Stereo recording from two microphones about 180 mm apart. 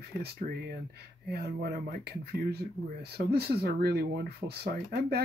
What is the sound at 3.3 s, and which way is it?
Speech, 60° right (ahead or behind).